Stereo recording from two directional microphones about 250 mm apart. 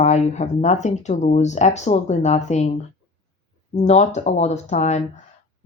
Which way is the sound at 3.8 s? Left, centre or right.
Left.